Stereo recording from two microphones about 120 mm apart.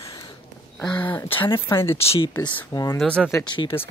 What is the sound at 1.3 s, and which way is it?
Speech, 45° left (ahead or behind).